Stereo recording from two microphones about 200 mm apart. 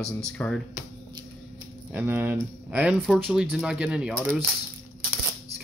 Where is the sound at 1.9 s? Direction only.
10° right (ahead or behind).